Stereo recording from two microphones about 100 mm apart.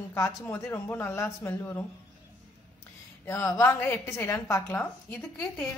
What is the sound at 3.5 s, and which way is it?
Speech, 25° left (ahead or behind).